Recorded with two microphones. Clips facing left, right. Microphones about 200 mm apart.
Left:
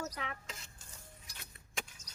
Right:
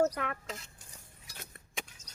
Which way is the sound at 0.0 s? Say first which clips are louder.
Right 12 dB; 55° right (ahead or behind).